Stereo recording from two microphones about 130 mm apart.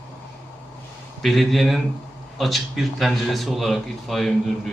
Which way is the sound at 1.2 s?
Centre (ahead or behind).